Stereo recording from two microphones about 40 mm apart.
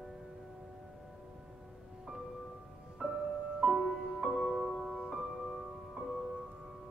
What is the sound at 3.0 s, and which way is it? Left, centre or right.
Music, right.